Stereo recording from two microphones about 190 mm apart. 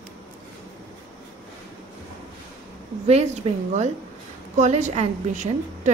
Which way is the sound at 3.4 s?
30° right (ahead or behind).